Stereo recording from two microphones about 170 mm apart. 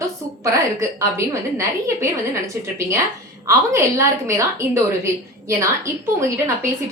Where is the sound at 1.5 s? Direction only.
15° right (ahead or behind).